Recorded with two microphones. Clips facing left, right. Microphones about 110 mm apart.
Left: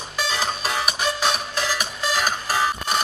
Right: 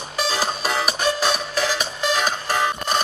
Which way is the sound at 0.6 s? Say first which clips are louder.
Right 2 dB; 35° right (ahead or behind).